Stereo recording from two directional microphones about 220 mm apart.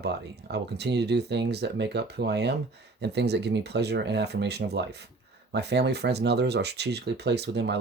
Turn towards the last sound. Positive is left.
turn(degrees=-50)  # may be behind; listen again after turning